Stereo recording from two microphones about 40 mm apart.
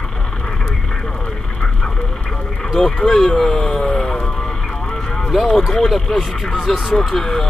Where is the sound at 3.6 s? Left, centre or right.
Left.